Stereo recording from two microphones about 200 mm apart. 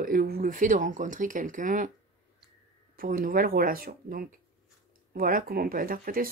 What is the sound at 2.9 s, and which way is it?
Speech, 45° right (ahead or behind).